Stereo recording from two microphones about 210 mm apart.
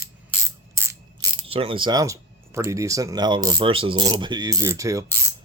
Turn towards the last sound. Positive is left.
turn(degrees=-15)  # may be behind; listen again after turning